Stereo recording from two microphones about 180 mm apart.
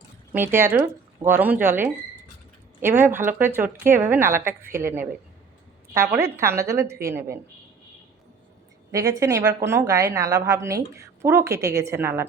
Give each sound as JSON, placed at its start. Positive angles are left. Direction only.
{"t": 0.3, "sound": "speech", "side_deg": -10}
{"t": 6.1, "sound": "speech", "side_deg": -15}
{"t": 8.9, "sound": "speech", "side_deg": -20}